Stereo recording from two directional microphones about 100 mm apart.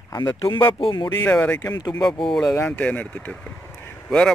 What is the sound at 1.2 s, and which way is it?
Speech, 20° left (ahead or behind).